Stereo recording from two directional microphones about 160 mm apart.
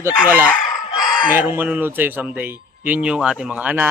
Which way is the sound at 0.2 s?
10° right (ahead or behind).